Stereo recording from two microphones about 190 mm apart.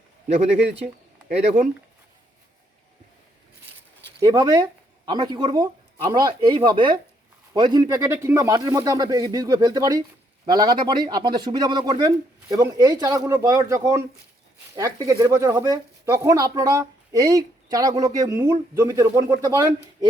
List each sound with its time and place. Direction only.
4.2 s speech: 20° right (ahead or behind)